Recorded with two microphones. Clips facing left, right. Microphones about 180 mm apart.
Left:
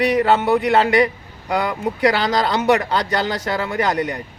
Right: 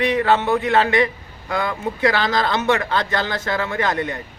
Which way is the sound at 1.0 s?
10° left (ahead or behind).